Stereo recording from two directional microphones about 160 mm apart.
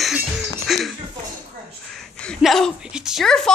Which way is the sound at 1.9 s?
5° left (ahead or behind).